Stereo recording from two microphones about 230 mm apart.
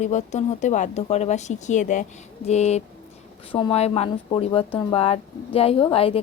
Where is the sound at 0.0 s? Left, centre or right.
Left.